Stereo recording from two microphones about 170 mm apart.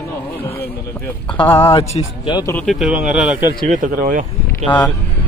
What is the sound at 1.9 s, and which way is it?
Speech, 40° left (ahead or behind).